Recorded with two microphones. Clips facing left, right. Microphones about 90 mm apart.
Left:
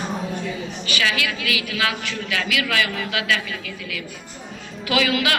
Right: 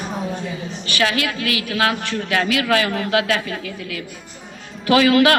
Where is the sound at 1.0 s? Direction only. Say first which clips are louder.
Right 4 dB; 40° right (ahead or behind).